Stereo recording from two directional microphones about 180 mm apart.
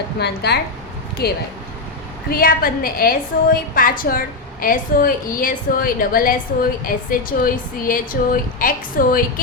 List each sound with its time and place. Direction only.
0.2 s a woman's voice: 65° left (ahead or behind)